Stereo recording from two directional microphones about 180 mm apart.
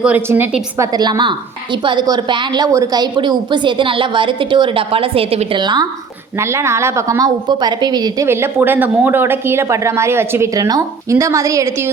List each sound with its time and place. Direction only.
0.0 s a woman's voice: 10° right (ahead or behind)
0.9 s a woman's voice: 20° right (ahead or behind)
6.3 s a woman's voice: 15° right (ahead or behind)